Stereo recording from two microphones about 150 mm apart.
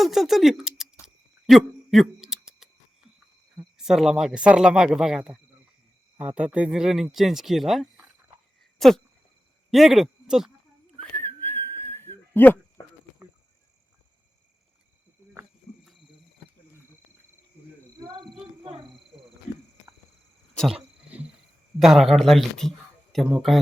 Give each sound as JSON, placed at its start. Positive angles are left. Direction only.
{"t": 0.0, "sound": "a sound", "side_deg": 0}
{"t": 3.6, "sound": "speech", "side_deg": -5}
{"t": 11.2, "sound": "whistling", "side_deg": 15}
{"t": 18.0, "sound": "a sound", "side_deg": -30}
{"t": 20.6, "sound": "wild animals", "side_deg": -5}
{"t": 21.8, "sound": "speech", "side_deg": 0}